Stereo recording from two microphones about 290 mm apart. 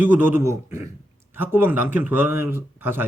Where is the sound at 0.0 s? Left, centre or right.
Centre.